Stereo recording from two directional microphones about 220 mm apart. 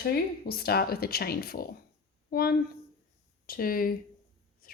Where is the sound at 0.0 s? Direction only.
45° left (ahead or behind).